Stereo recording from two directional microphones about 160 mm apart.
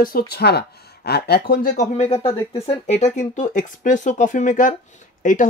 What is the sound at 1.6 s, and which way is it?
Speech, 50° left (ahead or behind).